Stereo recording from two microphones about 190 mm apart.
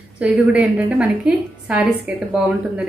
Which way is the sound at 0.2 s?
5° right (ahead or behind).